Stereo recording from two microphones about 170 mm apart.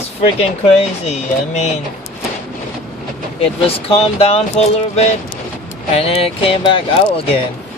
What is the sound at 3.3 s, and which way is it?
Speech, 35° left (ahead or behind).